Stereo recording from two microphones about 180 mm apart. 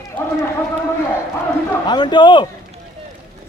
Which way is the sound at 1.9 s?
25° left (ahead or behind).